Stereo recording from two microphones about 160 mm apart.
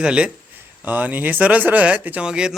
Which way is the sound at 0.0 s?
5° right (ahead or behind).